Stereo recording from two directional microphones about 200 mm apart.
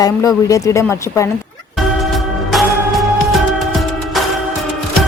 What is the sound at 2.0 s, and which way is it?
Music, centre (ahead or behind).